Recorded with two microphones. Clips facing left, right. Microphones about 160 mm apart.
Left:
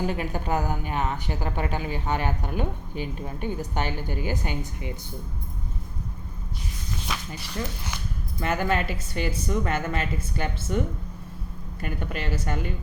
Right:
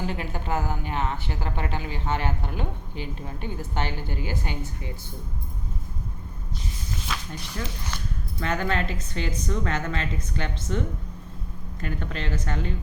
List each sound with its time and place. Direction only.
0.0 s speech: 15° left (ahead or behind)
8.4 s speech: 10° left (ahead or behind)